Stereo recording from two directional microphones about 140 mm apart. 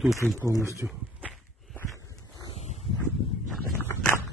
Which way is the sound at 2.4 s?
50° left (ahead or behind).